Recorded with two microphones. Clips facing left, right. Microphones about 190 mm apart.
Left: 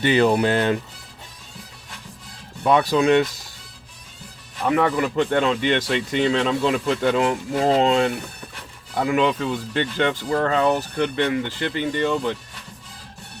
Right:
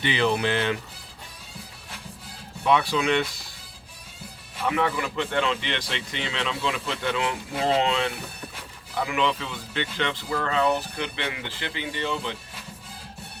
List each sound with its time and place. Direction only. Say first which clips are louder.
0.0 s speech: left 6 dB; 45° left (ahead or behind)
2.6 s speech: left 5 dB; 40° left (ahead or behind)
4.6 s speech: left 6 dB; 45° left (ahead or behind)